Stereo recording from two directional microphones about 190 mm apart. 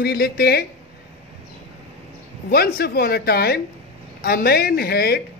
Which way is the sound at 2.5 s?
55° left (ahead or behind).